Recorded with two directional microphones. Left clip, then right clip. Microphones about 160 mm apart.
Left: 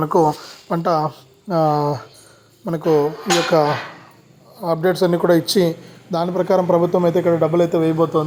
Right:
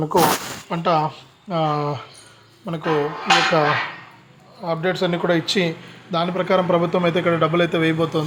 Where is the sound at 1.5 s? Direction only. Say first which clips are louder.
Left 4 dB; 5° left (ahead or behind).